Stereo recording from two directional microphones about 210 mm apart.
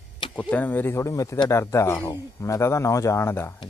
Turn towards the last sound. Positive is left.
turn(degrees=10)  # may be behind; listen again after turning